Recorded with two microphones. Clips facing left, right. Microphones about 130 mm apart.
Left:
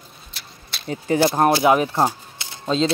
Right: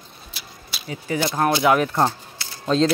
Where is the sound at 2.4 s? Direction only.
20° left (ahead or behind).